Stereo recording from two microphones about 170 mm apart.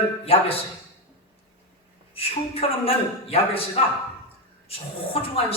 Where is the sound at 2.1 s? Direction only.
35° left (ahead or behind).